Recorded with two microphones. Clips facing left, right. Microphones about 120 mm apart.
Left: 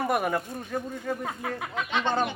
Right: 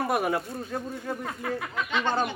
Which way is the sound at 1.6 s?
20° left (ahead or behind).